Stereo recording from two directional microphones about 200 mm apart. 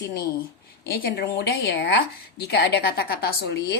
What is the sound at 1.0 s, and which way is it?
A woman's voice, 55° left (ahead or behind).